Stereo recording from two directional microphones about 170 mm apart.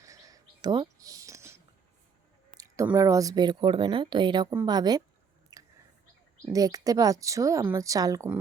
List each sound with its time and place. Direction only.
0.0 s whispering: 20° right (ahead or behind)
2.9 s a woman's voice: 20° right (ahead or behind)
5.5 s a sound: 20° right (ahead or behind)
6.5 s a woman's voice: 20° right (ahead or behind)